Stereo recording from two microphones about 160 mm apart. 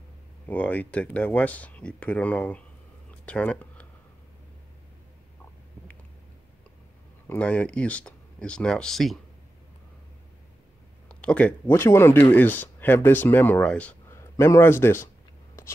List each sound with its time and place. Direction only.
0.5 s speech: 10° left (ahead or behind)
3.1 s a sound: 5° left (ahead or behind)
7.2 s speech: 10° left (ahead or behind)
11.1 s speech: 10° left (ahead or behind)